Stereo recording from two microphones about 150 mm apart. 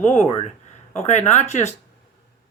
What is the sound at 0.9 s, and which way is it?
Speech, 50° left (ahead or behind).